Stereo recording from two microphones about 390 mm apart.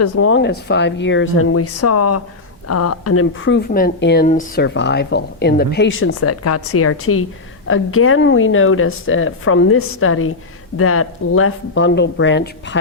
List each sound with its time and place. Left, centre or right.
0.0 s speech: left